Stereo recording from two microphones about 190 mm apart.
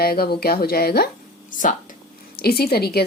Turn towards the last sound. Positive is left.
turn(degrees=55)  # may be behind; listen again after turning